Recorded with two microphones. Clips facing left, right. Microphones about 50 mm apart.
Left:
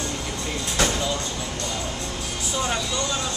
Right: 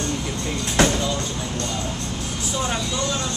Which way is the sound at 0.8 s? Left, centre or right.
Right.